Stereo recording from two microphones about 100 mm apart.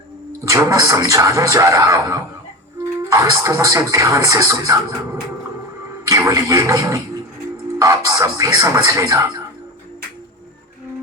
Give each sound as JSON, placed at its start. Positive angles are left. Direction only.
{"t": 0.4, "sound": "speech", "side_deg": -35}
{"t": 6.1, "sound": "speech", "side_deg": -35}